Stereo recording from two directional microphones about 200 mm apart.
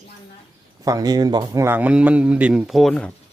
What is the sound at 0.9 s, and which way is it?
Speech, 20° right (ahead or behind).